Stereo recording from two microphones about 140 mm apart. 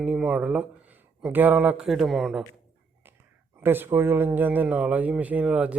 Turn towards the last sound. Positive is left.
turn(degrees=-10)  # may be behind; listen again after turning